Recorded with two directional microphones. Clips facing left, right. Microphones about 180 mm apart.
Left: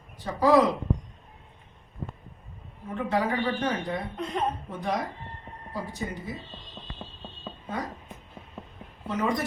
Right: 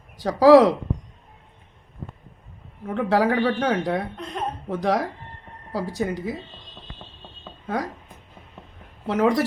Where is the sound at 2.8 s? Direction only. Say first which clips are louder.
Right 7 dB; 90° right.